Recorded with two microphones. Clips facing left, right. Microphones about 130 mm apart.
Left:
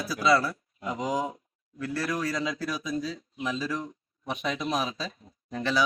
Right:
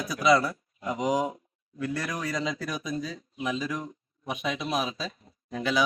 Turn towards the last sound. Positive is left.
turn(degrees=-10)  # may be behind; listen again after turning